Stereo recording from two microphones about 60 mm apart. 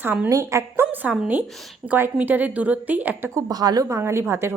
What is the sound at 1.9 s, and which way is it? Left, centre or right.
A woman's voice, right.